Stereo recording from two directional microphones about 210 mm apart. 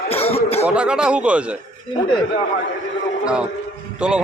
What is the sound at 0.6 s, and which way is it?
Speech, 5° right (ahead or behind).